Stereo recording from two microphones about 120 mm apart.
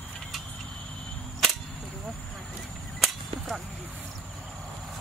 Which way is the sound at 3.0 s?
Centre (ahead or behind).